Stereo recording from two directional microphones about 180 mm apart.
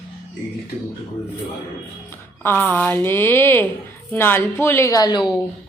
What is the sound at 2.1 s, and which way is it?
Music, 10° left (ahead or behind).